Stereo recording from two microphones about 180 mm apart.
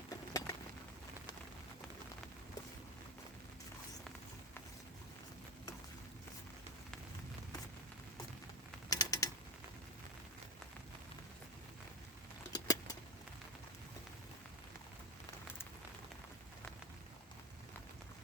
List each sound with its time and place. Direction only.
0.1 s a sound: 15° left (ahead or behind)
8.9 s mechanisms: 20° left (ahead or behind)
12.5 s keys jangling: 20° left (ahead or behind)